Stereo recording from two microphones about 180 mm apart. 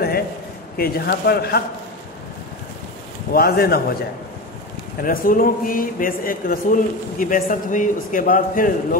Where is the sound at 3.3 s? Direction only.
55° left (ahead or behind).